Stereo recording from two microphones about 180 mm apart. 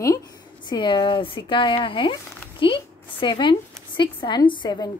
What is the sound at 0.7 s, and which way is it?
A woman's voice, 25° left (ahead or behind).